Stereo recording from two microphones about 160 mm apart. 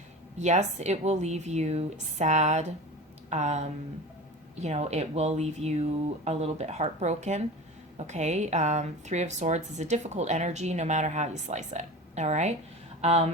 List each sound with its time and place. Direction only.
0.3 s a woman's voice: 45° right (ahead or behind)